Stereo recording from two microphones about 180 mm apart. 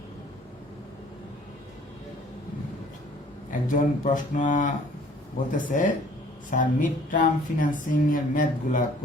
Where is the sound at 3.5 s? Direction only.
45° left (ahead or behind).